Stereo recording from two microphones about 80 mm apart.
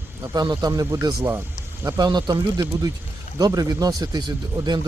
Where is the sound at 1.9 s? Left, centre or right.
Right.